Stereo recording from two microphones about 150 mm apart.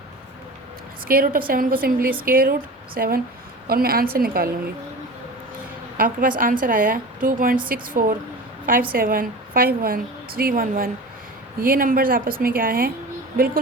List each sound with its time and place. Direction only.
1.0 s a woman's voice: 70° right (ahead or behind)
6.0 s a woman's voice: 65° right (ahead or behind)